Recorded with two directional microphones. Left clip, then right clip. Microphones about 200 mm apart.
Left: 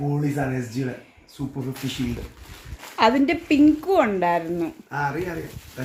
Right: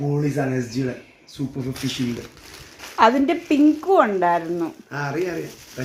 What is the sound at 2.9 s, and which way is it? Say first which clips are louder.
Speech: right 2 dB; 5° left (ahead or behind).